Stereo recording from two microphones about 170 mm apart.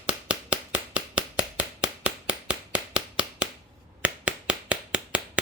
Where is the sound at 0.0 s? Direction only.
10° right (ahead or behind).